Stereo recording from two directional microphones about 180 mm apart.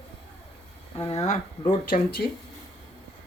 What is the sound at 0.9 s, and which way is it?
Speech, 35° left (ahead or behind).